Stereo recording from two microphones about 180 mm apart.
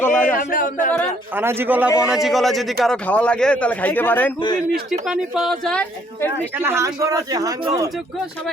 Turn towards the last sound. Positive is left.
turn(degrees=-20)  # may be behind; listen again after turning